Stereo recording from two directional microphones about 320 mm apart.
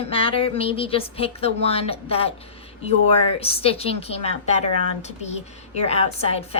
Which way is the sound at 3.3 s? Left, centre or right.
Centre.